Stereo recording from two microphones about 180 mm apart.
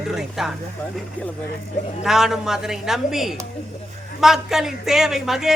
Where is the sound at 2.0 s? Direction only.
5° right (ahead or behind).